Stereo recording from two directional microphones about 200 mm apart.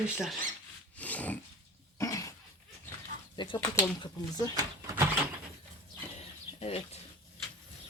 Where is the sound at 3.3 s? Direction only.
25° left (ahead or behind).